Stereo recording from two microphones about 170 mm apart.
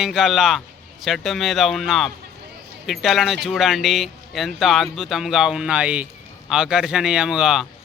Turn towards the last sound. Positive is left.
turn(degrees=-5)  # may be behind; listen again after turning